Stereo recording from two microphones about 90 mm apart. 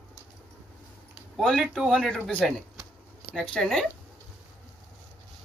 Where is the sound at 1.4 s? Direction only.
Centre (ahead or behind).